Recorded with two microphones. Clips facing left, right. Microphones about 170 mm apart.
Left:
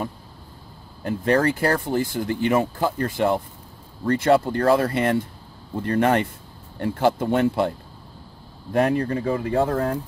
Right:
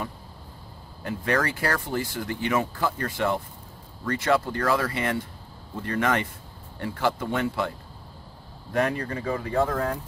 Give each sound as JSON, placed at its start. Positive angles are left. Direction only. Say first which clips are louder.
{"t": 1.0, "sound": "speech", "louder": "left 6 dB", "side_deg": 35}
{"t": 6.8, "sound": "speech", "louder": "left 6 dB", "side_deg": 45}
{"t": 8.7, "sound": "speech", "louder": "left 5 dB", "side_deg": 35}